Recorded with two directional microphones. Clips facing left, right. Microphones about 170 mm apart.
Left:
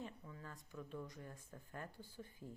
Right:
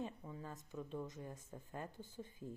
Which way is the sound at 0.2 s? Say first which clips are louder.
Right 5 dB; 25° right (ahead or behind).